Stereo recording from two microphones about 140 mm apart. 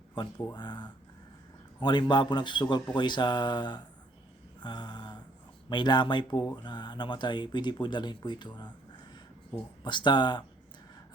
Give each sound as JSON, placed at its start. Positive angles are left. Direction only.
{"t": 0.5, "sound": "speech", "side_deg": 30}
{"t": 4.6, "sound": "a sound", "side_deg": 30}
{"t": 5.6, "sound": "speech", "side_deg": 30}
{"t": 9.8, "sound": "speech", "side_deg": 35}